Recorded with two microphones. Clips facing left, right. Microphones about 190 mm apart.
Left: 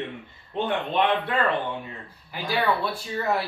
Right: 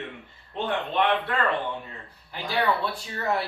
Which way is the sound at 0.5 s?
15° left (ahead or behind).